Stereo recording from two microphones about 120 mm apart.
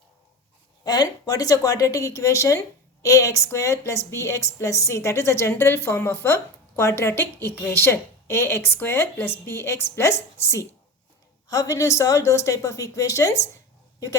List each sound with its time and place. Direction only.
0.9 s a woman's voice: 35° left (ahead or behind)